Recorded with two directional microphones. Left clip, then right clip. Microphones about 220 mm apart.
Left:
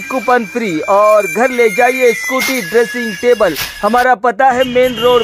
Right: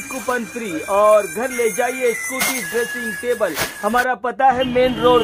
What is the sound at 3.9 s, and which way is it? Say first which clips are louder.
A man's voice: left 9 dB; 15° left (ahead or behind).